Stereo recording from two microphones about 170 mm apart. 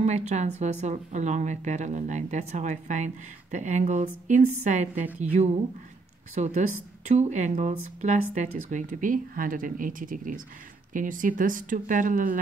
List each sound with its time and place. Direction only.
0.0 s speech: 40° right (ahead or behind)
6.3 s speech: 40° right (ahead or behind)